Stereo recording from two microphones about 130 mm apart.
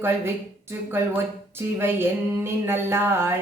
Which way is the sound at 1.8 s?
20° right (ahead or behind).